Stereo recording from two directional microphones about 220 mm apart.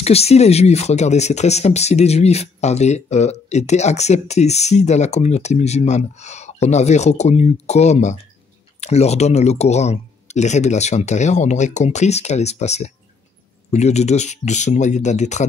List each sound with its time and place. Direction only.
0.0 s speech: 30° left (ahead or behind)